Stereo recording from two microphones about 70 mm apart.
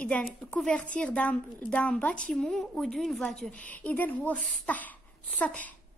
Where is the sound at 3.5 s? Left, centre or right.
Left.